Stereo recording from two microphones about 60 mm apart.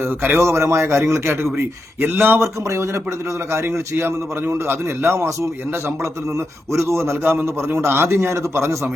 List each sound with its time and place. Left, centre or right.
0.3 s a man's voice: right
2.4 s a man's voice: right